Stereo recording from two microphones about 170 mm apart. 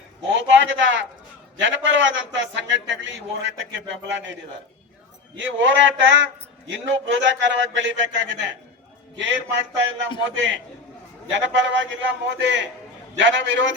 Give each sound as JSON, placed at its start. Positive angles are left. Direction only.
{"t": 0.3, "sound": "a sound", "side_deg": -90}
{"t": 1.6, "sound": "a man's voice", "side_deg": -90}
{"t": 5.4, "sound": "a man's voice", "side_deg": -90}